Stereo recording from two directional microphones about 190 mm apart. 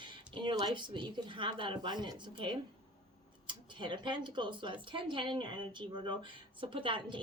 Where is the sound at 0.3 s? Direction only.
25° right (ahead or behind).